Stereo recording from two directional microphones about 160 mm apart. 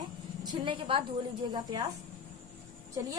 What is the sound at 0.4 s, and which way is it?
Speech, 30° right (ahead or behind).